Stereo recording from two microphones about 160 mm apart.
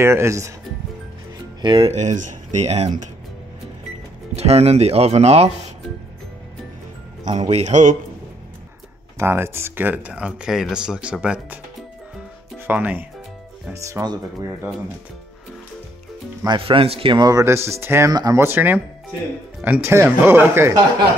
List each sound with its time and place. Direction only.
0.0 s speech: 15° right (ahead or behind)
1.6 s speech: 30° right (ahead or behind)
1.9 s speech: 45° right (ahead or behind)
4.4 s speech: 40° right (ahead or behind)
7.3 s speech: 40° right (ahead or behind)
9.2 s speech: 15° right (ahead or behind)
12.6 s speech: 10° right (ahead or behind)
16.4 s speech: 30° right (ahead or behind); by 20.8 s 15° right (ahead or behind)